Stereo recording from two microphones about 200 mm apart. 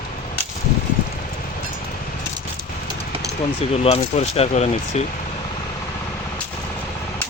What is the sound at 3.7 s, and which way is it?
Speech, 30° left (ahead or behind).